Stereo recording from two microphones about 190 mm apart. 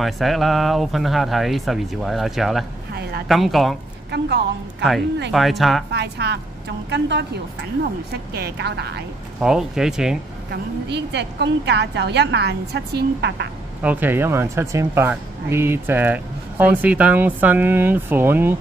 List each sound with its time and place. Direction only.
0.0 s speech: centre (ahead or behind)
2.9 s a sound: 55° right (ahead or behind)
3.3 s speech: centre (ahead or behind)
4.1 s a woman's voice: 65° right (ahead or behind)
5.3 s speech: centre (ahead or behind)
5.9 s a woman's voice: 60° right (ahead or behind)
9.4 s speech: 5° right (ahead or behind)
10.5 s a woman's voice: 65° right (ahead or behind)
13.8 s speech: 10° right (ahead or behind)